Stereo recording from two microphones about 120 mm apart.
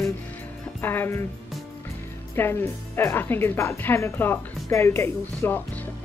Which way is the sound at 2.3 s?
20° left (ahead or behind).